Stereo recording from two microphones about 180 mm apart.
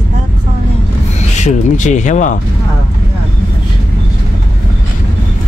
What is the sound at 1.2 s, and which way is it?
Speech, 40° left (ahead or behind).